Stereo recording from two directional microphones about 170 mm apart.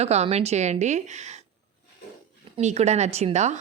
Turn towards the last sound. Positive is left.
turn(degrees=-40)  # may be behind; listen again after turning